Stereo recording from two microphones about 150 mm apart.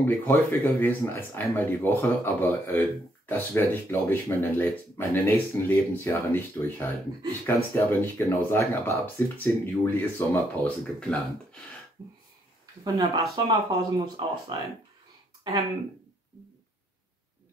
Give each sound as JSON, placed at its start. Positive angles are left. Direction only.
{"t": 0.0, "sound": "speech", "side_deg": 15}
{"t": 12.8, "sound": "speech", "side_deg": -25}